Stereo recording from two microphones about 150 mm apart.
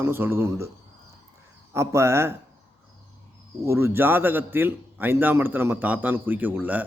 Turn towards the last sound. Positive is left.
turn(degrees=-10)  # may be behind; listen again after turning